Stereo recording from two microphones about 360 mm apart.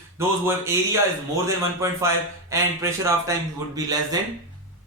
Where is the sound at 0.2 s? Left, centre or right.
Centre.